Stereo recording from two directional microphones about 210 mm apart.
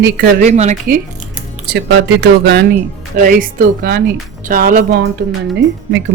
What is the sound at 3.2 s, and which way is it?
Speech, 40° right (ahead or behind).